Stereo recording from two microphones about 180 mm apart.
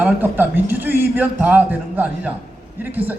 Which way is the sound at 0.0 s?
10° right (ahead or behind).